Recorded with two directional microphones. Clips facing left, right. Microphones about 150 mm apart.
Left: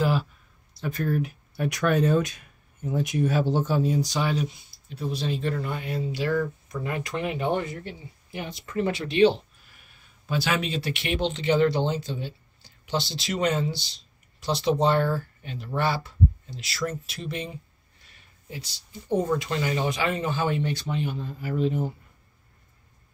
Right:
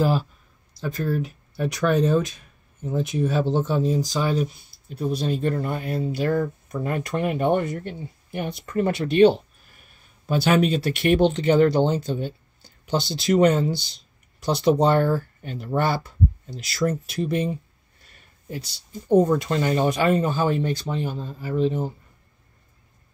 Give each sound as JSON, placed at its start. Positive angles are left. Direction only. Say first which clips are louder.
{"t": 1.0, "sound": "speech", "louder": "even", "side_deg": -30}
{"t": 4.2, "sound": "speech", "louder": "right 3 dB", "side_deg": -45}
{"t": 18.5, "sound": "speech", "louder": "right 6 dB", "side_deg": -50}